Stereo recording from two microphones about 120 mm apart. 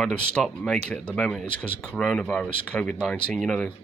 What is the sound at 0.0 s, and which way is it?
Speech, 10° left (ahead or behind).